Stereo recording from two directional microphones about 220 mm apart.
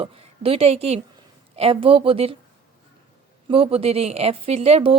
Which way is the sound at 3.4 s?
25° right (ahead or behind).